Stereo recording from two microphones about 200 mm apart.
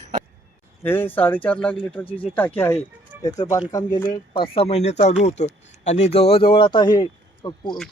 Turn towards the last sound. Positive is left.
turn(degrees=20)  # may be behind; listen again after turning